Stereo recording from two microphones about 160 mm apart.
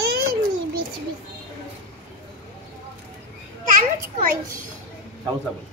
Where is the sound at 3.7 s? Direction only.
55° right (ahead or behind).